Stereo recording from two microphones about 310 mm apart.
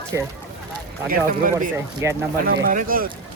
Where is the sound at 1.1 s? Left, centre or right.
Right.